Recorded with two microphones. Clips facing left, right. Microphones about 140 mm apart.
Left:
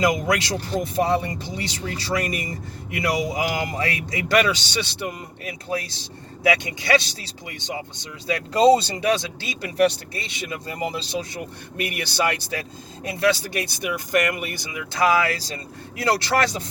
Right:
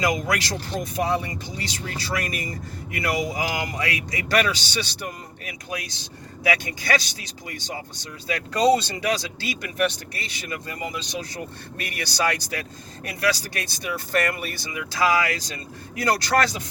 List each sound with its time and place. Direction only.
0.0 s speech: 25° left (ahead or behind)